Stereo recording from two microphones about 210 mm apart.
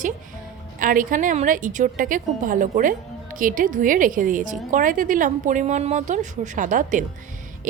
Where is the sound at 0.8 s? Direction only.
40° right (ahead or behind).